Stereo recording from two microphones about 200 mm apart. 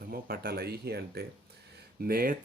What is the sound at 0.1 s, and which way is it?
Speech, 50° right (ahead or behind).